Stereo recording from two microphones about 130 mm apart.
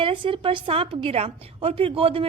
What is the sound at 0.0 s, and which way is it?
A woman's voice, 40° right (ahead or behind).